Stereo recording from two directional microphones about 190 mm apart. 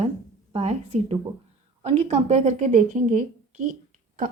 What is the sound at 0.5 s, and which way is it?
A woman's voice, 35° right (ahead or behind).